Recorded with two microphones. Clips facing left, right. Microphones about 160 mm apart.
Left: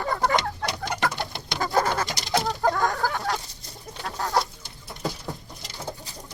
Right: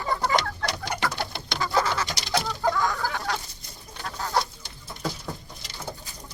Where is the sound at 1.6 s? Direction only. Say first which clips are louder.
Left 2 dB; 45° left (ahead or behind).